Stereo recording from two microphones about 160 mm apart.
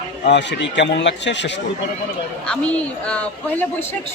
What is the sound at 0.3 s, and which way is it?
A man's voice, 90° left.